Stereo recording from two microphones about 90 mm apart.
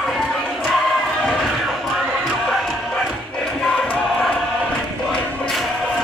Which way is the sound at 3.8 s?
15° left (ahead or behind).